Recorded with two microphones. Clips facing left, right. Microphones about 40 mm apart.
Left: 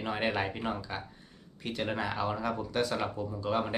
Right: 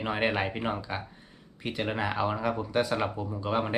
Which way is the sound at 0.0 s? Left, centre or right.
Centre.